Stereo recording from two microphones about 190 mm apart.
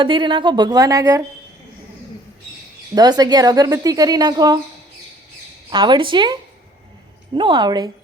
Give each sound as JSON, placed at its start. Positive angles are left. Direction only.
{"t": 0.0, "sound": "speech", "side_deg": -25}
{"t": 2.9, "sound": "speech", "side_deg": -20}
{"t": 5.7, "sound": "speech", "side_deg": -25}